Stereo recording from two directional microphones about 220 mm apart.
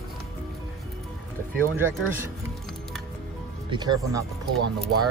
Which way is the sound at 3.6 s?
20° right (ahead or behind).